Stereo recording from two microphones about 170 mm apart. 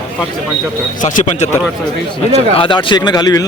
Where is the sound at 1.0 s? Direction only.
50° left (ahead or behind).